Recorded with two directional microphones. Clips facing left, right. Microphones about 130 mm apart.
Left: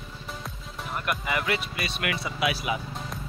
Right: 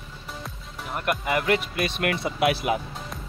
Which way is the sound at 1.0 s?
50° right (ahead or behind).